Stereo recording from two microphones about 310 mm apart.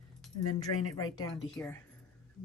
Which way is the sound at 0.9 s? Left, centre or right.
Centre.